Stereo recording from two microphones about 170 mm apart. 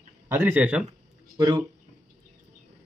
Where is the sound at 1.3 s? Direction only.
20° right (ahead or behind).